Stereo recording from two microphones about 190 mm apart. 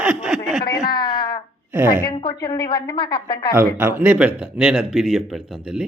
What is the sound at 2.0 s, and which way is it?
A woman's voice, 20° left (ahead or behind).